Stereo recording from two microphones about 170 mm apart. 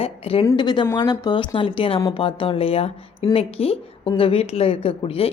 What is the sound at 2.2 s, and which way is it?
A woman's voice, 30° left (ahead or behind).